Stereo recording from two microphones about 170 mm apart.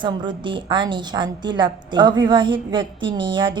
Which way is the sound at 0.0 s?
25° right (ahead or behind).